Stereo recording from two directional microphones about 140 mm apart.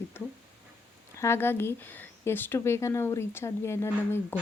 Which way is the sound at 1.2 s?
15° left (ahead or behind).